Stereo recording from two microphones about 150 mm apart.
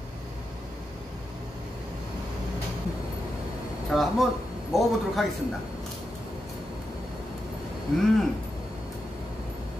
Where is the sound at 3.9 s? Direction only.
Centre (ahead or behind).